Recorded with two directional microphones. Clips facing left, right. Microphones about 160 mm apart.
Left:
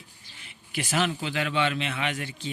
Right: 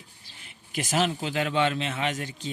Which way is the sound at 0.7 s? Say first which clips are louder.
Right 1 dB; 40° right (ahead or behind).